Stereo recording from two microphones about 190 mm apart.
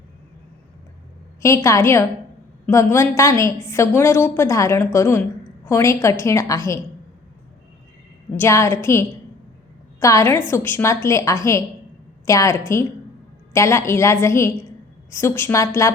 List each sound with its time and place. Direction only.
1.4 s a woman's voice: 15° left (ahead or behind)
8.4 s a woman's voice: 15° left (ahead or behind)